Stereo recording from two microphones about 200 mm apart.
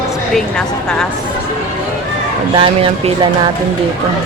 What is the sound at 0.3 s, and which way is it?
Speech, 5° left (ahead or behind).